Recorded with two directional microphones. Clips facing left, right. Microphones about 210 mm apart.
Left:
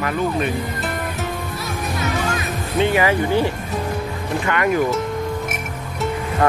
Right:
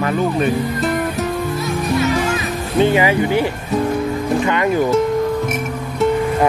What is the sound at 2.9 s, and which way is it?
Speech, 20° right (ahead or behind).